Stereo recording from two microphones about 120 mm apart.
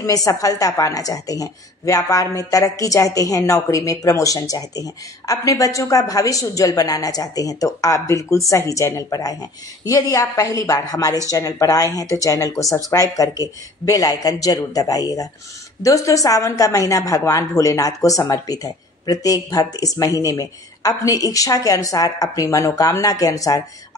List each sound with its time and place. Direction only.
0.0 s a woman's voice: 30° left (ahead or behind)